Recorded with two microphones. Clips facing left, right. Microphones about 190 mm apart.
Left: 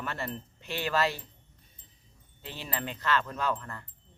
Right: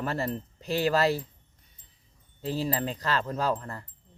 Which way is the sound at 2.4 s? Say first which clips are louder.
Right 9 dB; 35° right (ahead or behind).